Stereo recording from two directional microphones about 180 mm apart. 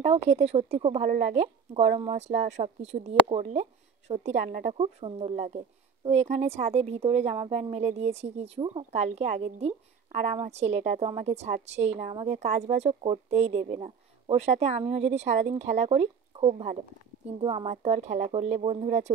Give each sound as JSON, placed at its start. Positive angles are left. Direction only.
{"t": 0.0, "sound": "a woman's voice", "side_deg": -35}
{"t": 4.7, "sound": "a woman's voice", "side_deg": -30}